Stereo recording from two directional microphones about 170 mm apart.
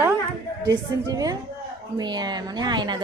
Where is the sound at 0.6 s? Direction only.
20° right (ahead or behind).